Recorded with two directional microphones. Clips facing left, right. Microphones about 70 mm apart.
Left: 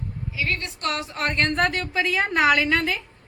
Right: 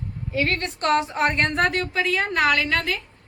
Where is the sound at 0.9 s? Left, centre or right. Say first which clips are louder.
Right 6 dB; right.